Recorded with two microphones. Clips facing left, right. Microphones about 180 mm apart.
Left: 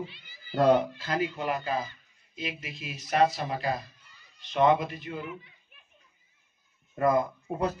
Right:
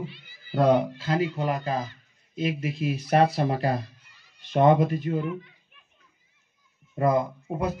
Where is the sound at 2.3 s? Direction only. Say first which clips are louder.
Right 10 dB; 50° right (ahead or behind).